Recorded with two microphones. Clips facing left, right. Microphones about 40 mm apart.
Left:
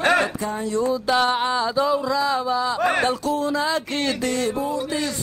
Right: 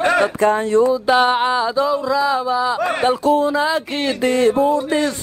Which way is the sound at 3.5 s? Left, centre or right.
Centre.